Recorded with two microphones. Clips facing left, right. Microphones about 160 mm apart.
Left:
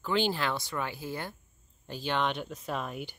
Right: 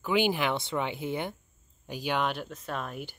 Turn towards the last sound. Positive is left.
turn(degrees=0)  # may be behind; listen again after turning